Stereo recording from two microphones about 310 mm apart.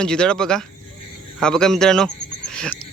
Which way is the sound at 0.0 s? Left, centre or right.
Centre.